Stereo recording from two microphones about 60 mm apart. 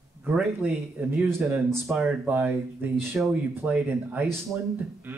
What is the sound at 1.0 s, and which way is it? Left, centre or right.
A man's voice, right.